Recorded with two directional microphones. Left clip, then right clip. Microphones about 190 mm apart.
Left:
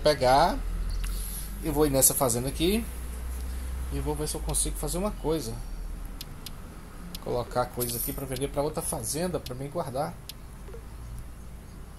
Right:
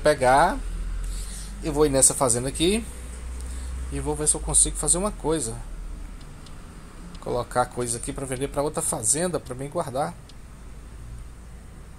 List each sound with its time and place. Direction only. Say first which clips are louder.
0.0 s speech: right 3 dB; 10° right (ahead or behind)
1.6 s speech: right 4 dB; 25° right (ahead or behind)
3.9 s speech: right 5 dB; 20° right (ahead or behind)
7.2 s speech: right 4 dB; 15° right (ahead or behind)